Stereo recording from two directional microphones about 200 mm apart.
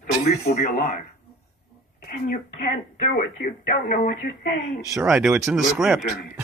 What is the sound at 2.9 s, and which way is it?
Speech, 40° left (ahead or behind).